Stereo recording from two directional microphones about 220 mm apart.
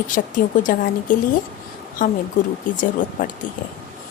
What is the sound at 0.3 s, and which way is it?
Speech, 35° left (ahead or behind).